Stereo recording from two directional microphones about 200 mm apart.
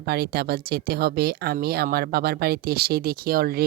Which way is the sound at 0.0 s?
50° right (ahead or behind).